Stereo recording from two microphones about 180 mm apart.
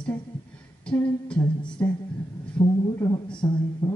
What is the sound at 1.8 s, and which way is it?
Speech, 15° left (ahead or behind).